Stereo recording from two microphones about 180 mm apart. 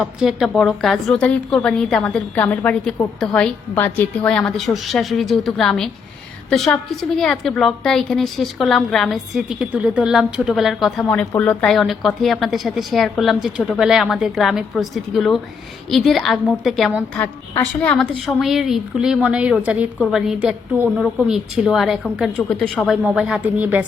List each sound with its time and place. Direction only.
0.2 s a woman's voice: centre (ahead or behind)